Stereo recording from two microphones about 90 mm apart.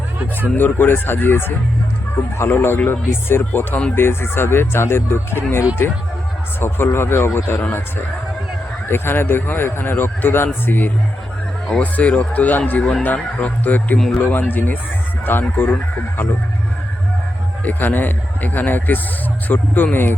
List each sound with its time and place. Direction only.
0.5 s a man's voice: 20° left (ahead or behind)
6.6 s a man's voice: 25° left (ahead or behind)
8.9 s a man's voice: 25° left (ahead or behind)
17.7 s a man's voice: 20° left (ahead or behind)